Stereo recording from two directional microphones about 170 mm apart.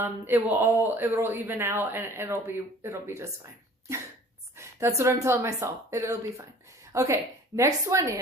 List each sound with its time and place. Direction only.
0.0 s speech: 10° right (ahead or behind)
4.5 s speech: 15° right (ahead or behind)